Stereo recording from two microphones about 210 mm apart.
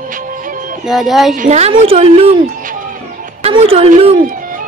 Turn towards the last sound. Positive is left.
turn(degrees=-30)  # may be behind; listen again after turning